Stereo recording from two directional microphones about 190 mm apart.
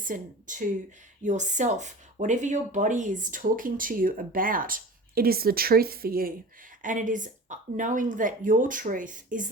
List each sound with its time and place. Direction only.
0.0 s speech: 45° right (ahead or behind)